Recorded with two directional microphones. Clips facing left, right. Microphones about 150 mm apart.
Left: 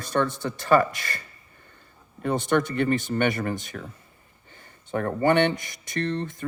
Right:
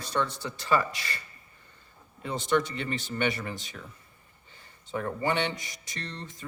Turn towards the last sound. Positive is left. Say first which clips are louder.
# left 12 dB
turn(degrees=55)  # may be behind; listen again after turning